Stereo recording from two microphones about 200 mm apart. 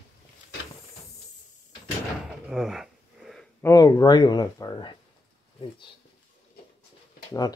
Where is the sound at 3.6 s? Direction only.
20° left (ahead or behind).